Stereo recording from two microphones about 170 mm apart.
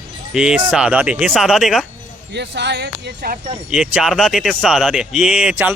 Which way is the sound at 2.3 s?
90° right.